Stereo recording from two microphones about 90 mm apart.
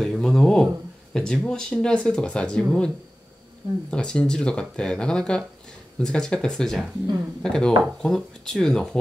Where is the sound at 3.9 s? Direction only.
10° left (ahead or behind).